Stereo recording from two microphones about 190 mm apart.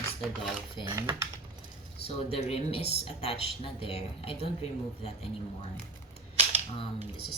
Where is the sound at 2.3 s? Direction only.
30° left (ahead or behind).